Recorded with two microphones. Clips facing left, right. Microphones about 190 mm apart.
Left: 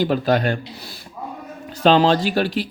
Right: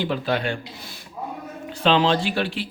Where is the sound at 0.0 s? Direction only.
40° left (ahead or behind).